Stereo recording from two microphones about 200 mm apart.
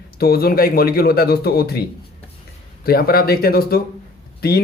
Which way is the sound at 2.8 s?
50° left (ahead or behind).